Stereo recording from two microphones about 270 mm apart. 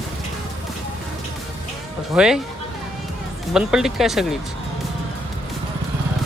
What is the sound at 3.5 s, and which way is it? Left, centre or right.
Speech, centre.